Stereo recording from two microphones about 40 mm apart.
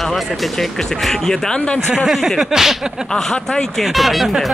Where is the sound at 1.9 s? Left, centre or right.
Centre.